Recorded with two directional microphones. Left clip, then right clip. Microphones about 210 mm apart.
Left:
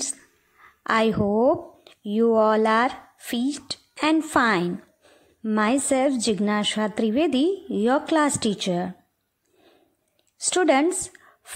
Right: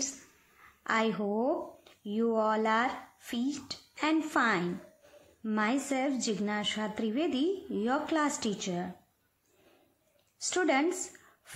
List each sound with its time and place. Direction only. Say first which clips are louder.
0.8 s a woman's voice: left 9 dB; 35° left (ahead or behind)
10.4 s a woman's voice: left 9 dB; 35° left (ahead or behind)